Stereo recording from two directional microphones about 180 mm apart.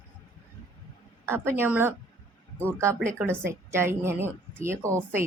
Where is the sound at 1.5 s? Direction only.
10° right (ahead or behind).